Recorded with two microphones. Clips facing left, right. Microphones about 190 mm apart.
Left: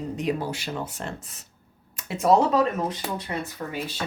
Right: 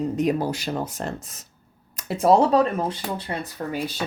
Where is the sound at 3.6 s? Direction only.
40° right (ahead or behind).